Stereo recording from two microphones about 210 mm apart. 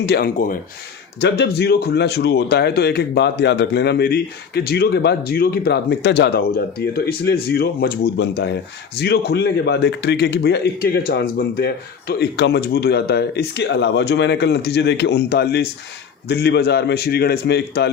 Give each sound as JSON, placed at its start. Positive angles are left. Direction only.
{"t": 0.0, "sound": "speech", "side_deg": 50}
{"t": 1.2, "sound": "speech", "side_deg": 50}